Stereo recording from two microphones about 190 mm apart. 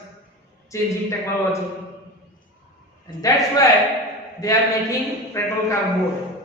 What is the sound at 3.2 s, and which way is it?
A man's voice, 20° left (ahead or behind).